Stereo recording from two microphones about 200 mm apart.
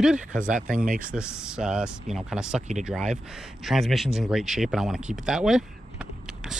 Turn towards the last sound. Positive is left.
turn(degrees=-5)  # may be behind; listen again after turning